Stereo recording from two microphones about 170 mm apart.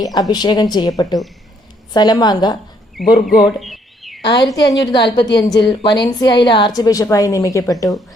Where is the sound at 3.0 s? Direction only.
Centre (ahead or behind).